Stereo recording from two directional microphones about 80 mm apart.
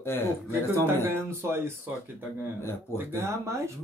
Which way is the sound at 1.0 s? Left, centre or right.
Right.